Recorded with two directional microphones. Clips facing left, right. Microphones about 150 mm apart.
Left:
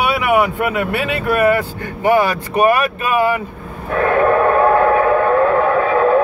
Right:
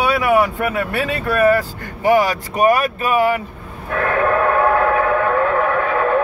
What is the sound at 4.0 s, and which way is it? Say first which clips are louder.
Train: left 4 dB; 20° left (ahead or behind).